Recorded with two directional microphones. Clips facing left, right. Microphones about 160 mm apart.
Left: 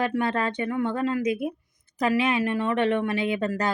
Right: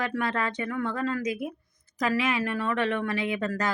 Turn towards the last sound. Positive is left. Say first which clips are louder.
# left 3 dB
turn(degrees=25)  # may be behind; listen again after turning